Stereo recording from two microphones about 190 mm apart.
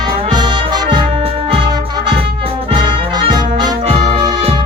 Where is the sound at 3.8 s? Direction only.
35° right (ahead or behind).